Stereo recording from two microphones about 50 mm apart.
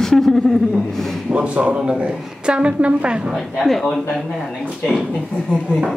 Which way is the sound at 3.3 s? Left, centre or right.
Centre.